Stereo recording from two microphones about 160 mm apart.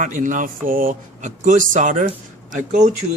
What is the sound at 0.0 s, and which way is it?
Speech, 55° right (ahead or behind).